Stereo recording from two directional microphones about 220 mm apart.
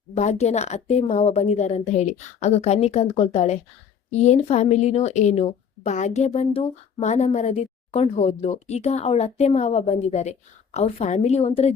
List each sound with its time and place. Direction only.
0.1 s a woman's voice: 30° left (ahead or behind)